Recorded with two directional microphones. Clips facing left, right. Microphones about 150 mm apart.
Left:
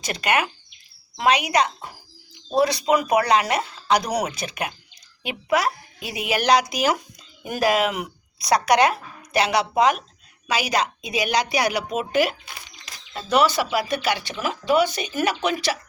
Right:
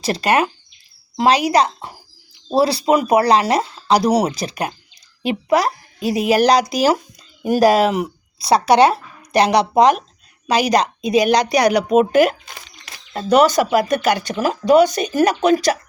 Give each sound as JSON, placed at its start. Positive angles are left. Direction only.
{"t": 0.0, "sound": "a woman's voice", "side_deg": -35}